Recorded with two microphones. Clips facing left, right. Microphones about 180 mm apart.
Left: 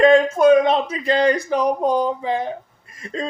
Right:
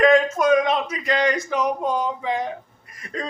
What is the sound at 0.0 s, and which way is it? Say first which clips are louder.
Speech: left 4 dB; 30° left (ahead or behind).